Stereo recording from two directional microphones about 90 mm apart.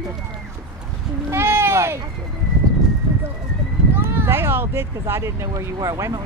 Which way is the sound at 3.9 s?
25° right (ahead or behind).